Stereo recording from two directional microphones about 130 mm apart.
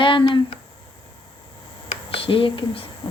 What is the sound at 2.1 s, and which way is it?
Speech, 45° left (ahead or behind).